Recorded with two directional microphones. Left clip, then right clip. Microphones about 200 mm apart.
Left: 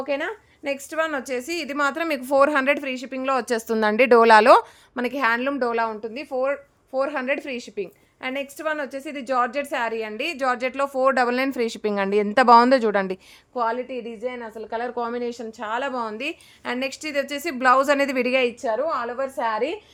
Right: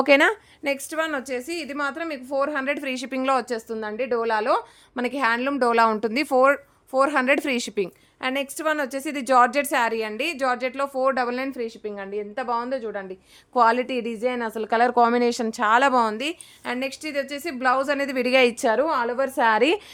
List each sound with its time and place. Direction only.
0.0 s a woman's voice: 30° right (ahead or behind)
0.6 s a woman's voice: 5° right (ahead or behind); by 2.7 s 25° left (ahead or behind)
2.9 s speech: 10° right (ahead or behind)
3.7 s a woman's voice: 30° left (ahead or behind)
4.9 s a woman's voice: centre (ahead or behind)
5.5 s a woman's voice: 20° right (ahead or behind)
6.0 s a woman's voice: 40° right (ahead or behind)
8.2 s a woman's voice: 15° right (ahead or behind); by 13.1 s 45° left (ahead or behind)
13.5 s a woman's voice: 25° right (ahead or behind)
16.6 s a woman's voice: 5° left (ahead or behind)
18.6 s a woman's voice: 45° right (ahead or behind)